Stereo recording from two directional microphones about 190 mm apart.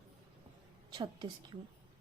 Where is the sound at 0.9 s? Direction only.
25° right (ahead or behind).